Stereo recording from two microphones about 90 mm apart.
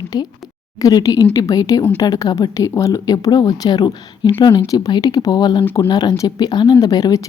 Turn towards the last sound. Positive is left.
turn(degrees=40)  # may be behind; listen again after turning